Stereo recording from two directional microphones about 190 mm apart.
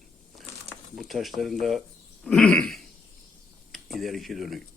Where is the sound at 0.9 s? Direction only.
Centre (ahead or behind).